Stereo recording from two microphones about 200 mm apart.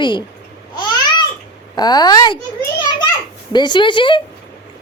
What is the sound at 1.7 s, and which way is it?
Speech, 20° left (ahead or behind).